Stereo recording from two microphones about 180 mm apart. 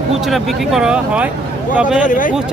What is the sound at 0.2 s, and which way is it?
Speech, centre (ahead or behind).